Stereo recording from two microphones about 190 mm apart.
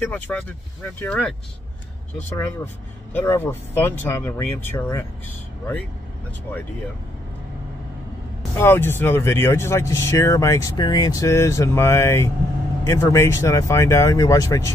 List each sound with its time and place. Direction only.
0.0 s speech: 5° left (ahead or behind)
8.5 s speech: 10° left (ahead or behind)